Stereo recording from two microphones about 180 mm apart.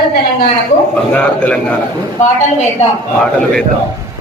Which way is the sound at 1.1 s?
10° left (ahead or behind).